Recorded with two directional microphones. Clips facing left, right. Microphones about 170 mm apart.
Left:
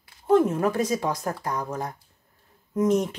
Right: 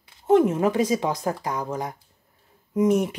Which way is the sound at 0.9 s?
20° right (ahead or behind).